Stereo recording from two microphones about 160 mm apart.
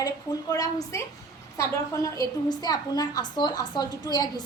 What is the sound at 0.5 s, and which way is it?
Speech, 20° left (ahead or behind).